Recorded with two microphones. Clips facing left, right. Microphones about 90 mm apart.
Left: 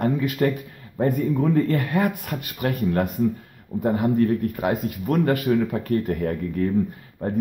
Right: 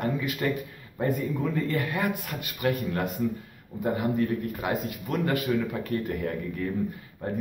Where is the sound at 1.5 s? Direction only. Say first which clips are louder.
Left 7 dB; 40° left (ahead or behind).